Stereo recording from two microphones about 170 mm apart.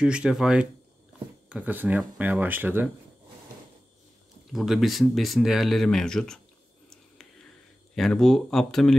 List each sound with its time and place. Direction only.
0.0 s speech: 5° right (ahead or behind)
4.5 s speech: centre (ahead or behind)
7.9 s speech: centre (ahead or behind)